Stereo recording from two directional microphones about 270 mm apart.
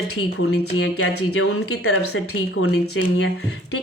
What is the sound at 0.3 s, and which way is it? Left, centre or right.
Speech, left.